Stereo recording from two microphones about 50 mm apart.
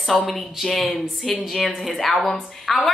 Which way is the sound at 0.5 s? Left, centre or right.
Centre.